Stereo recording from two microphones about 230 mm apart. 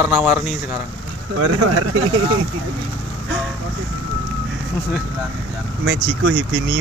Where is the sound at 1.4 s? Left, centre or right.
Right.